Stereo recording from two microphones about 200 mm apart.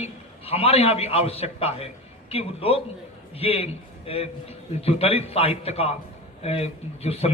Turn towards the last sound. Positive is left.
turn(degrees=30)  # may be behind; listen again after turning